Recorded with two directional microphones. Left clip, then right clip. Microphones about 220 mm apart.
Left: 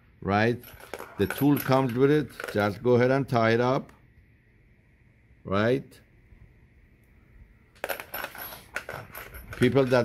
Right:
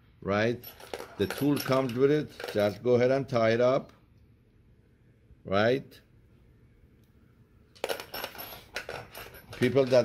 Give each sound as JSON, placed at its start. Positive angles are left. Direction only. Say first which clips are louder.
{"t": 0.2, "sound": "coin", "louder": "left 3 dB", "side_deg": 45}
{"t": 0.7, "sound": "speech", "louder": "even", "side_deg": 0}
{"t": 1.4, "sound": "speech", "louder": "left 4 dB", "side_deg": 45}
{"t": 5.4, "sound": "speech", "louder": "even", "side_deg": 35}
{"t": 7.8, "sound": "coin", "louder": "left 1 dB", "side_deg": -10}
{"t": 9.6, "sound": "speech", "louder": "left 1 dB", "side_deg": 45}